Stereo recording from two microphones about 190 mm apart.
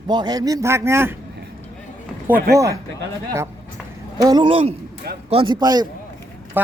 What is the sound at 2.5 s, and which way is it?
Speech, 15° right (ahead or behind).